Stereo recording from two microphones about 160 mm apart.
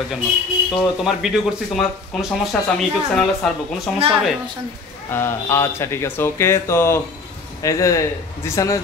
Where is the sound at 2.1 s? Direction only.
Centre (ahead or behind).